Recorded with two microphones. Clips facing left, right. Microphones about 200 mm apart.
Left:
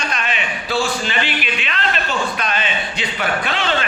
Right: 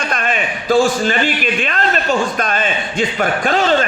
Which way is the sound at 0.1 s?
50° right (ahead or behind).